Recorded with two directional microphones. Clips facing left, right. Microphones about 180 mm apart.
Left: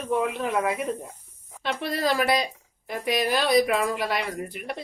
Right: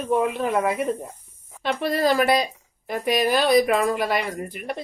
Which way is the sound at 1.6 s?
50° right (ahead or behind).